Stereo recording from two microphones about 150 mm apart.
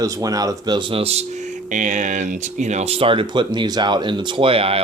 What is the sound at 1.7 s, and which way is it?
Speech, 60° right (ahead or behind).